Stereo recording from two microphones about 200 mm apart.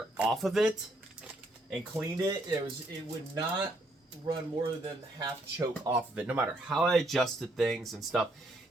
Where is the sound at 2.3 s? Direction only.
20° right (ahead or behind).